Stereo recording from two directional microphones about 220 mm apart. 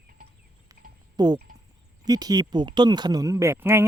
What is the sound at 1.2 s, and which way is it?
A man's voice, 20° right (ahead or behind).